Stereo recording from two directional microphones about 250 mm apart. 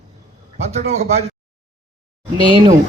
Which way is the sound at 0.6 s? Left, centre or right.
Right.